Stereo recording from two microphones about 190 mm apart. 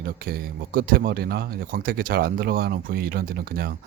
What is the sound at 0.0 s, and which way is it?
Speech, 50° right (ahead or behind).